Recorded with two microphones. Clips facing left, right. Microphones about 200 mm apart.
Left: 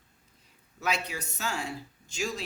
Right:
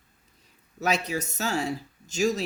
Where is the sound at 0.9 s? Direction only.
40° right (ahead or behind).